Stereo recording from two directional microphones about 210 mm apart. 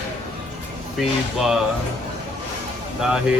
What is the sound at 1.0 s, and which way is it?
Speech, centre (ahead or behind).